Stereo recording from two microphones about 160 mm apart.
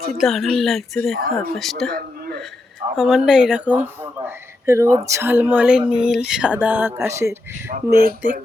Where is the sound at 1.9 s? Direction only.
65° right (ahead or behind).